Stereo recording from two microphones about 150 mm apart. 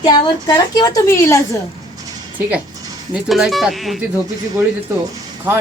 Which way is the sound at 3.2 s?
Centre (ahead or behind).